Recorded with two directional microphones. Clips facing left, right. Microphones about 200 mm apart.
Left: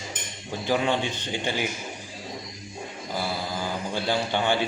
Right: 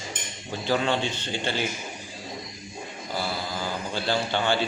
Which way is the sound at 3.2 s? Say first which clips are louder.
Left 1 dB; 15° left (ahead or behind).